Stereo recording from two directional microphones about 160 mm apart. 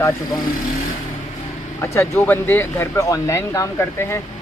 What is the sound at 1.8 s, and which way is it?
Speech, 15° left (ahead or behind).